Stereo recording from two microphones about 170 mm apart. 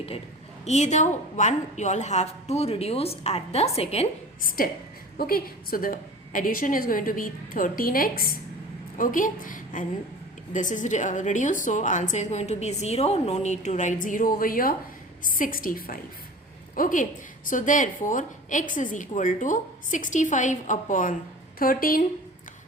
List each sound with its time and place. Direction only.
0.6 s a woman's voice: 40° left (ahead or behind)
4.4 s a woman's voice: 55° left (ahead or behind)